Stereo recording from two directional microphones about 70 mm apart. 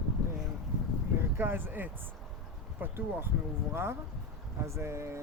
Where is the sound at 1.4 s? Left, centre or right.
Right.